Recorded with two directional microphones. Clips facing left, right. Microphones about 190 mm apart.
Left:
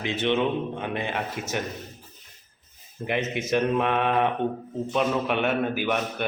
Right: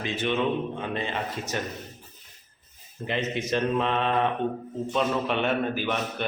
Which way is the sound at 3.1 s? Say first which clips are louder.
Left 2 dB; 15° left (ahead or behind).